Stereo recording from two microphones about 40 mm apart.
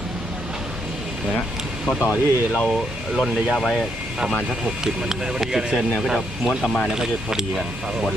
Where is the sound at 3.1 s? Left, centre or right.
Centre.